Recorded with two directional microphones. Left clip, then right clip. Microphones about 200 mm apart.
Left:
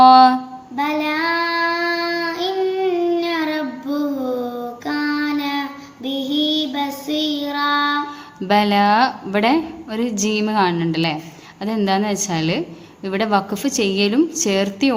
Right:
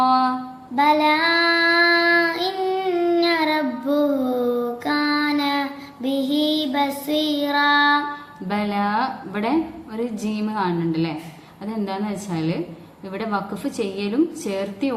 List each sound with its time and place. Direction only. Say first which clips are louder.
0.0 s a sound: left 9 dB; 50° left (ahead or behind)
0.8 s child singing: right 4 dB; 30° right (ahead or behind)
4.9 s female singing: even; 30° right (ahead or behind)
8.4 s a woman's voice: left 9 dB; 50° left (ahead or behind)